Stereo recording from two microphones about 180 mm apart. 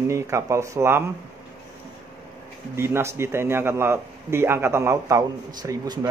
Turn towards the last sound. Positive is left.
turn(degrees=-20)  # may be behind; listen again after turning